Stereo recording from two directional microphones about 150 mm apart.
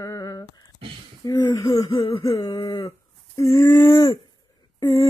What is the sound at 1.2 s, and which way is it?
Speech, 25° left (ahead or behind).